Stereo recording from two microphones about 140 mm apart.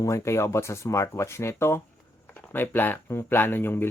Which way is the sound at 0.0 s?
20° left (ahead or behind).